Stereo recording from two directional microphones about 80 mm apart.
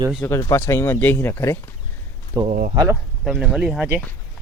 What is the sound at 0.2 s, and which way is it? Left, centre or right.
Speech, left.